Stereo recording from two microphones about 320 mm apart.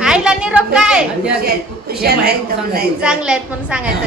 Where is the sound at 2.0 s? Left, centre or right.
Right.